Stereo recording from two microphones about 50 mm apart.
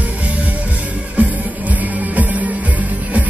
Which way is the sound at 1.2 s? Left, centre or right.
Right.